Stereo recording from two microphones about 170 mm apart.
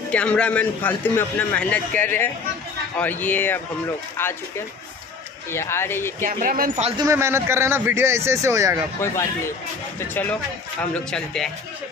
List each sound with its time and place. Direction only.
0.1 s a man's voice: 5° left (ahead or behind)
6.2 s speech: 55° right (ahead or behind)
7.0 s a man's voice: 15° right (ahead or behind)
9.0 s a man's voice: 15° left (ahead or behind)